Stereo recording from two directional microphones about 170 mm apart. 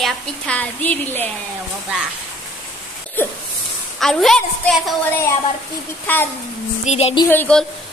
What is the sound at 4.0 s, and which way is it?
Speech, centre (ahead or behind).